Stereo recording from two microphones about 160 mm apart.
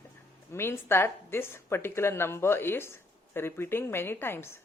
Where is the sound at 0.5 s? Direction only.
15° left (ahead or behind).